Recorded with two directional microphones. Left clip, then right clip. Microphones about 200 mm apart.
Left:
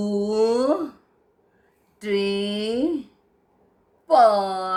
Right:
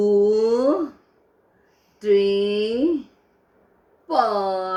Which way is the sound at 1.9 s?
30° left (ahead or behind).